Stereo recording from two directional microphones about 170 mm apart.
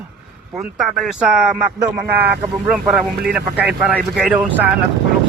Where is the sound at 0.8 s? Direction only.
Centre (ahead or behind).